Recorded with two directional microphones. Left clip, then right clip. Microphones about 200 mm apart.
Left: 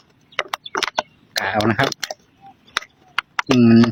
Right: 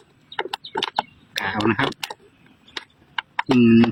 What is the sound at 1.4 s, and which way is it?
Speech, 55° left (ahead or behind).